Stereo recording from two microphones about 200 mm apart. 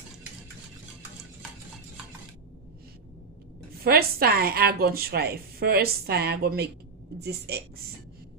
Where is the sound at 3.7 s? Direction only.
50° right (ahead or behind).